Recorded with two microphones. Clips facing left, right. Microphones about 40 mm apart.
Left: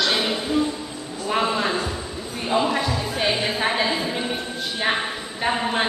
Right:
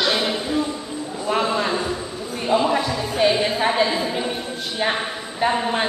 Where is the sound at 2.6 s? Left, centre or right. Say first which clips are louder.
Right 2 dB; centre.